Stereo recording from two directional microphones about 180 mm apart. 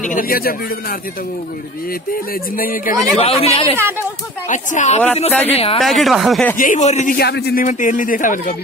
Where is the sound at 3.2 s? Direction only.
35° left (ahead or behind).